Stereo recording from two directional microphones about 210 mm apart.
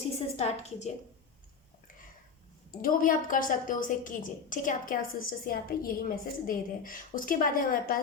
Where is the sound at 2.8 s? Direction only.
40° left (ahead or behind).